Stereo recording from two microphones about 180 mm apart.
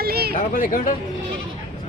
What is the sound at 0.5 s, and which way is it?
Speech, 50° left (ahead or behind).